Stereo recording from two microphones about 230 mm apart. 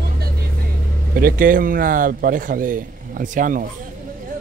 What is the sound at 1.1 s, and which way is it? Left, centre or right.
Speech, right.